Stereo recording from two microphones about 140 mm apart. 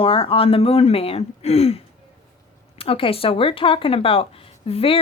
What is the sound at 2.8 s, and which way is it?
Speech, 40° left (ahead or behind).